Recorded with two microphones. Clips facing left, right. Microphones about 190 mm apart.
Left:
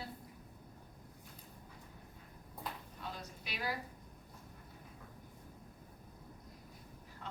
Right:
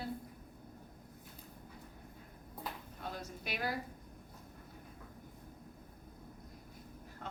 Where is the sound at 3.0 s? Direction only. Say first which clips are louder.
Right 4 dB; 50° right (ahead or behind).